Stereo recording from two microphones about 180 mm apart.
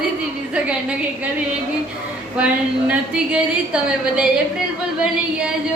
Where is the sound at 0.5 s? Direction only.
5° right (ahead or behind).